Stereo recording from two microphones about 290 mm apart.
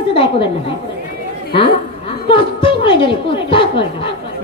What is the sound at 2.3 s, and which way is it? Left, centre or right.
A woman's voice, centre.